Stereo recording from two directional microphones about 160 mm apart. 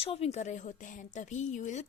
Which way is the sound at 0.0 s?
40° left (ahead or behind).